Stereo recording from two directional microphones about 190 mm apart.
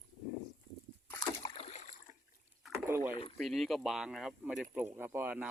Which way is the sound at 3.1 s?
30° left (ahead or behind).